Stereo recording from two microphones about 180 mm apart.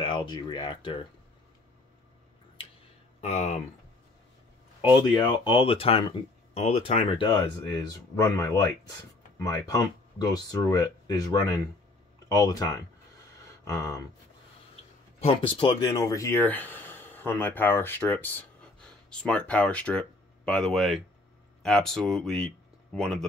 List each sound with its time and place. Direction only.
0.0 s speech: 25° left (ahead or behind)
3.2 s speech: 40° left (ahead or behind)
4.8 s speech: 25° left (ahead or behind)
12.4 s speech: 20° left (ahead or behind)
13.7 s a sound: 15° left (ahead or behind)
15.1 s speech: 30° left (ahead or behind); by 23.2 s 5° left (ahead or behind)